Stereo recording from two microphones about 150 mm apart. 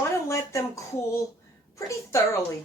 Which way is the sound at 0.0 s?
20° left (ahead or behind).